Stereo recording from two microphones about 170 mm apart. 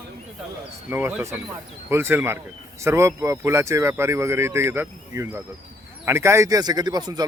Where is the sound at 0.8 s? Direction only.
10° right (ahead or behind).